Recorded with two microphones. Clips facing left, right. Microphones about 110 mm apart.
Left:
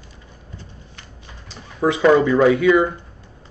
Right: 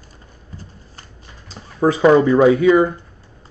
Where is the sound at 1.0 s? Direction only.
35° right (ahead or behind).